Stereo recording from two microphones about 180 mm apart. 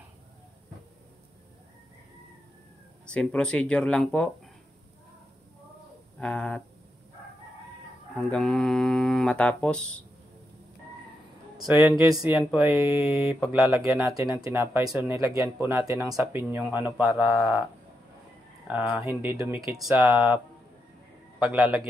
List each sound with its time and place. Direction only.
3.1 s speech: 5° left (ahead or behind)
6.1 s a sound: 5° left (ahead or behind)
8.2 s speech: centre (ahead or behind)
11.7 s speech: 10° right (ahead or behind)
15.1 s speech: 15° right (ahead or behind)
18.7 s speech: 5° right (ahead or behind)
19.9 s speech: centre (ahead or behind)
21.4 s speech: 10° right (ahead or behind)